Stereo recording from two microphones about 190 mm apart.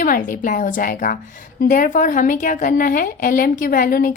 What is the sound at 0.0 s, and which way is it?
A woman's voice, 45° left (ahead or behind).